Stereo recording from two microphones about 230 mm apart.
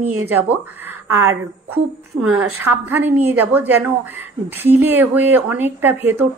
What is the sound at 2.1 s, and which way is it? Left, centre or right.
Speech, right.